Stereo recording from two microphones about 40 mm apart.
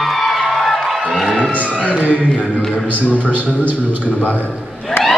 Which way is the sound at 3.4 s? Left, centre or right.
Right.